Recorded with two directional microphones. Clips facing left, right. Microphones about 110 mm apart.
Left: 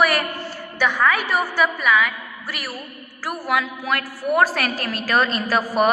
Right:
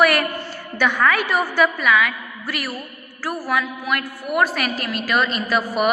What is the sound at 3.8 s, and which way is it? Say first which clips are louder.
A woman's voice: left 1 dB; 30° left (ahead or behind).